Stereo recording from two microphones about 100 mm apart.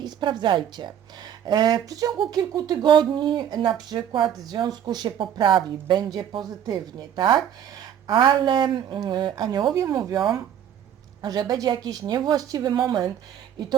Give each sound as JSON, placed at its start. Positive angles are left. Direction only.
{"t": 0.0, "sound": "speech", "side_deg": -50}